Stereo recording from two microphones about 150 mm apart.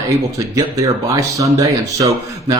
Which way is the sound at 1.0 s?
20° right (ahead or behind).